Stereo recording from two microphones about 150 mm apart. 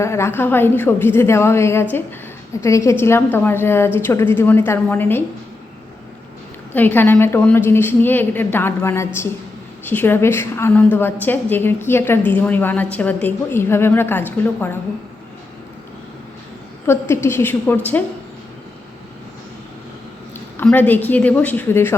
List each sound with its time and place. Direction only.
0.0 s a woman's voice: 20° left (ahead or behind)
6.7 s a woman's voice: 15° left (ahead or behind)
16.8 s a woman's voice: 15° left (ahead or behind)
20.6 s a woman's voice: 10° left (ahead or behind)